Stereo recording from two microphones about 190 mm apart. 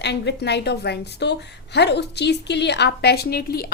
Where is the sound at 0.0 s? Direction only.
65° left (ahead or behind).